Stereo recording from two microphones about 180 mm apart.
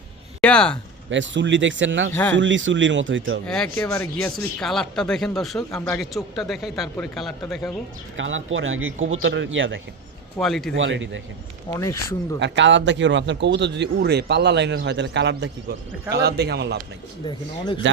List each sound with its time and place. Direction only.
0.4 s speech: 5° left (ahead or behind)
1.1 s speech: 90° right
3.4 s speech: 5° left (ahead or behind)
3.8 s speech: 15° left (ahead or behind)
4.2 s speech: centre (ahead or behind)
8.1 s speech: 90° right
10.3 s speech: centre (ahead or behind)
10.8 s speech: 90° right
11.7 s speech: 15° left (ahead or behind)
12.4 s a man's voice: 90° right; by 15.4 s 75° right (ahead or behind)
16.0 s a man's voice: 65° right (ahead or behind)
17.2 s speech: 25° left (ahead or behind)